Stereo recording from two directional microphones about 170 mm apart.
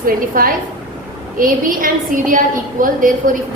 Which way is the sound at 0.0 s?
55° right (ahead or behind).